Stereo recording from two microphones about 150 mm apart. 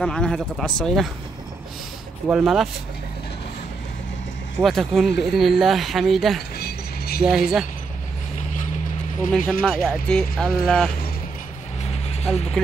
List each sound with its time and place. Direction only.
0.0 s speech: 5° left (ahead or behind)
2.2 s speech: 5° right (ahead or behind)
4.6 s speech: centre (ahead or behind)
6.5 s mechanisms: 90° left
7.2 s speech: 5° right (ahead or behind)
9.5 s speech: centre (ahead or behind)
11.8 s vehicle: 45° left (ahead or behind)
12.6 s a sound: 5° left (ahead or behind)